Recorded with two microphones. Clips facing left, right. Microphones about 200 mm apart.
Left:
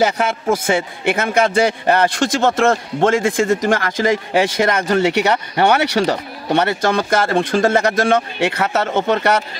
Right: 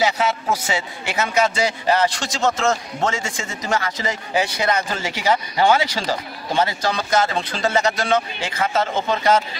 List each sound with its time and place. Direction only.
0.0 s a man's voice: 55° left (ahead or behind)
4.8 s speech: 65° left (ahead or behind)